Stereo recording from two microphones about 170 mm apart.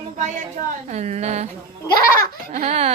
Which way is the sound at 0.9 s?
40° right (ahead or behind).